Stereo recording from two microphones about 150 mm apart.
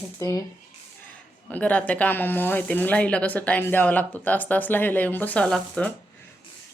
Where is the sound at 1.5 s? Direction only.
10° left (ahead or behind).